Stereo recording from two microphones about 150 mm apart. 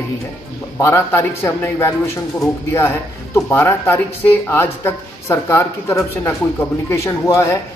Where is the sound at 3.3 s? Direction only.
15° left (ahead or behind).